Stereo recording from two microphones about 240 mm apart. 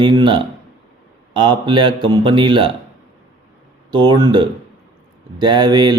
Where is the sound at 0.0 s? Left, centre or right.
Centre.